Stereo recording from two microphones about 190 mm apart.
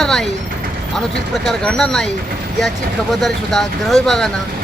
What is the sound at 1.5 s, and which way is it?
Speech, centre (ahead or behind).